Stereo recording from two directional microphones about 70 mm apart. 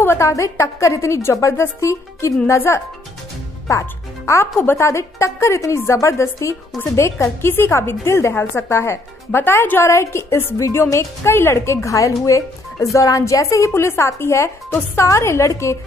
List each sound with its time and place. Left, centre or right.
0.0 s a woman's voice: left